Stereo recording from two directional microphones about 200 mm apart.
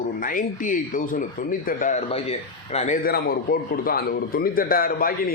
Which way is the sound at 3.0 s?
50° left (ahead or behind).